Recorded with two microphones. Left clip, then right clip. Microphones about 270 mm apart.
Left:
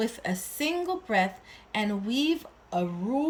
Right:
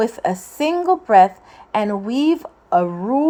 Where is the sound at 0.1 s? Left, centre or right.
Centre.